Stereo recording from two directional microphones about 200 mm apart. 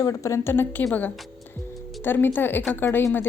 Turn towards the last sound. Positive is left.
turn(degrees=10)  # may be behind; listen again after turning